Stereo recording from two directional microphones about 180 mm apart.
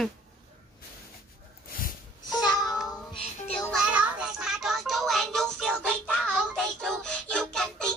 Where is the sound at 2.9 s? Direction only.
30° left (ahead or behind).